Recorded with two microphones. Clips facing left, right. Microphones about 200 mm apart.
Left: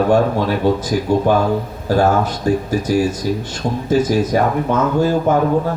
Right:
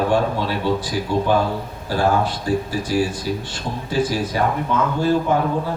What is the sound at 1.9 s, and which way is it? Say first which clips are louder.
Speech: left 4 dB; 45° left (ahead or behind).